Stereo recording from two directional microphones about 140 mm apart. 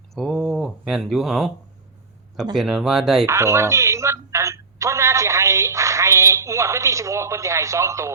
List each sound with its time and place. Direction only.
0.1 s a sound: centre (ahead or behind)
2.6 s speech: 5° right (ahead or behind)
3.2 s telephone: 20° right (ahead or behind)